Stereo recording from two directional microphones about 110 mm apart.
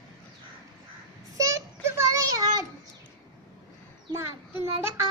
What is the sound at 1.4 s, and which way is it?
Child singing, 30° right (ahead or behind).